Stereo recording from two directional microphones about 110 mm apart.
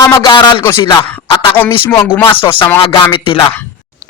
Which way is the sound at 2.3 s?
55° left (ahead or behind).